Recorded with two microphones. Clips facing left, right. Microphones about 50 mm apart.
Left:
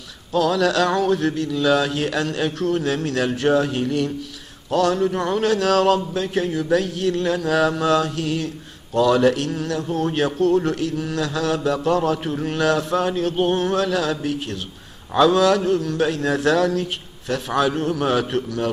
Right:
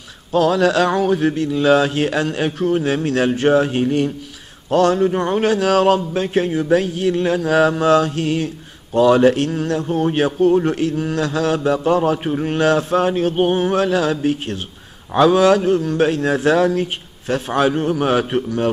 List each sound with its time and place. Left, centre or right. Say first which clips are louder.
0.3 s a man's voice: right 4 dB; right
1.3 s a man's voice: right 4 dB; right
6.1 s a man's voice: right 4 dB; right
7.3 s a sound: right 4 dB; centre
8.9 s a man's voice: right 4 dB; right
10.7 s a man's voice: right 4 dB; right
15.1 s a man's voice: right 3 dB; right